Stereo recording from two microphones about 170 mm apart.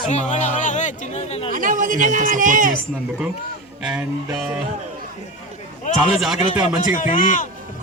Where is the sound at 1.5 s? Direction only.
50° right (ahead or behind).